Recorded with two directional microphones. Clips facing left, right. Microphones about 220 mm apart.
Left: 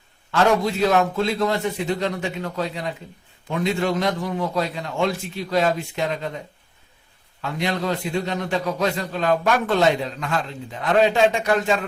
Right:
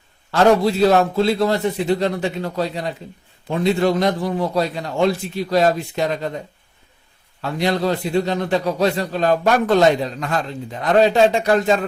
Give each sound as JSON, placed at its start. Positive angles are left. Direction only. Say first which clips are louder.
{"t": 0.3, "sound": "a man's voice", "louder": "right 5 dB", "side_deg": -35}
{"t": 7.4, "sound": "a man's voice", "louder": "right 5 dB", "side_deg": -35}